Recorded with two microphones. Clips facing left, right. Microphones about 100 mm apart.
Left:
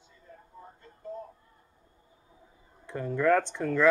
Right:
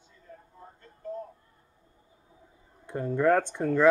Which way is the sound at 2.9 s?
15° right (ahead or behind).